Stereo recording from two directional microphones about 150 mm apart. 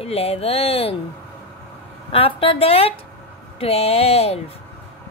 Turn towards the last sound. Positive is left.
turn(degrees=40)  # may be behind; listen again after turning